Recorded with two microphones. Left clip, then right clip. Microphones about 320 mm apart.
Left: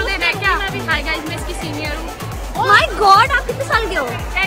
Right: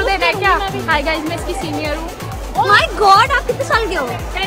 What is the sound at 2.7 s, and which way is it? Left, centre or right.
Speech, centre.